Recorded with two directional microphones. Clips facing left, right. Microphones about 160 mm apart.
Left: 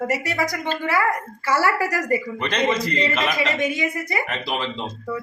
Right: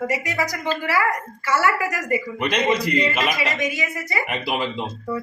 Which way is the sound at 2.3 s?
10° right (ahead or behind).